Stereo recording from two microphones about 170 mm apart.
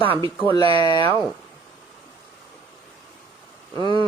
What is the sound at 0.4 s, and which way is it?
Speech, 25° left (ahead or behind).